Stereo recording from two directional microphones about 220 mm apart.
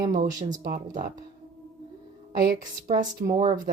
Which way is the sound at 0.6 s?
35° right (ahead or behind).